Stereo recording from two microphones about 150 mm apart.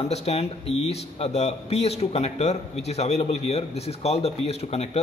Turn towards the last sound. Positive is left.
turn(degrees=45)  # may be behind; listen again after turning